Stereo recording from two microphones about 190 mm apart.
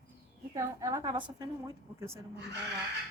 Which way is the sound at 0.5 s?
15° right (ahead or behind).